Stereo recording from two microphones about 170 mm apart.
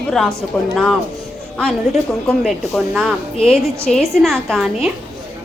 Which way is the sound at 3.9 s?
45° left (ahead or behind).